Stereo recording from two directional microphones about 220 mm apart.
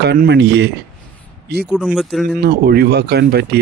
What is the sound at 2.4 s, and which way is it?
Speech, 45° right (ahead or behind).